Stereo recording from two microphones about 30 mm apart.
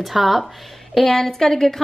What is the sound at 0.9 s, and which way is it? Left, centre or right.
Speech, centre.